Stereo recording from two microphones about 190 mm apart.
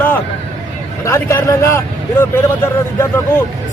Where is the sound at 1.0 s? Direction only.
15° left (ahead or behind).